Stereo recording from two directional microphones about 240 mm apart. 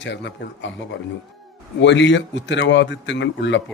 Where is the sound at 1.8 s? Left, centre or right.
Left.